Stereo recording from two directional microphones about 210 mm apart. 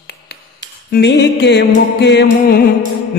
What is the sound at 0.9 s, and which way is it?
Music, 55° left (ahead or behind).